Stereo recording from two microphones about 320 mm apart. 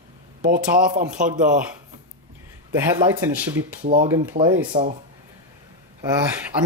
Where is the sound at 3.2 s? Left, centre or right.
Centre.